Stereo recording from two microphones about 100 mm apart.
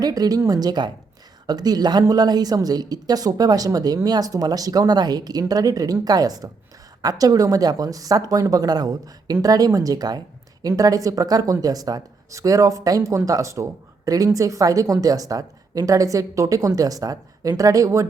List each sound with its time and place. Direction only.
0.0 s a woman's voice: 40° right (ahead or behind)